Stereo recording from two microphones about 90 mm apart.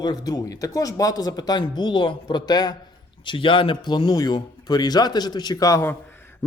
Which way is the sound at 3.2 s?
70° left (ahead or behind).